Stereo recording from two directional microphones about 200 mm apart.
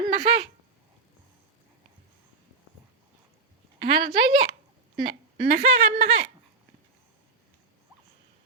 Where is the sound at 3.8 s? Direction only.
25° right (ahead or behind).